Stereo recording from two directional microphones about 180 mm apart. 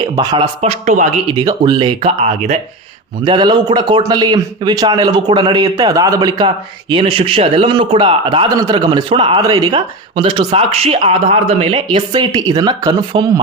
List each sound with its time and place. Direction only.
0.2 s a man's voice: 20° right (ahead or behind)
0.6 s speech: 35° right (ahead or behind)
1.3 s a man's voice: 25° right (ahead or behind)
3.2 s a man's voice: 25° right (ahead or behind)